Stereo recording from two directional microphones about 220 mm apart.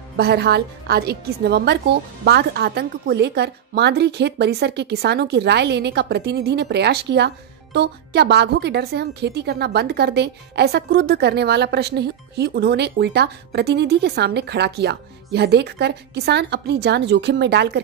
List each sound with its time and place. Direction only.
0.2 s a woman's voice: 45° right (ahead or behind)